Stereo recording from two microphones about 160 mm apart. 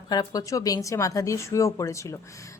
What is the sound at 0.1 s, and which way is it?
A woman's voice, 25° left (ahead or behind).